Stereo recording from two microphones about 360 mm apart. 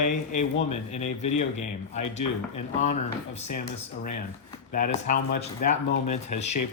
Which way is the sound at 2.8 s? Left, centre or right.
Centre.